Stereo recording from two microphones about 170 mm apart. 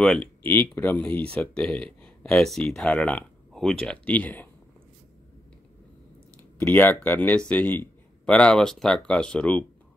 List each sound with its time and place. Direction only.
0.0 s speech: 5° left (ahead or behind)
6.6 s speech: 10° left (ahead or behind)